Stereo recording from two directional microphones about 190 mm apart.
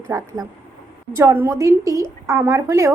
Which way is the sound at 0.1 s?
15° right (ahead or behind).